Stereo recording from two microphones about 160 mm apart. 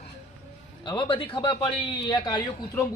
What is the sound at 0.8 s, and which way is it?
Speech, 25° left (ahead or behind).